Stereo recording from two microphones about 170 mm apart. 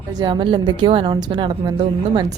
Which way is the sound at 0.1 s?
25° right (ahead or behind).